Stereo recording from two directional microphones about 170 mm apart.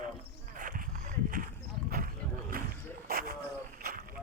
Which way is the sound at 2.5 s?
60° right (ahead or behind).